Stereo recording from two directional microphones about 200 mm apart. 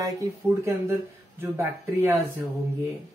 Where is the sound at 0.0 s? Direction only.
15° right (ahead or behind).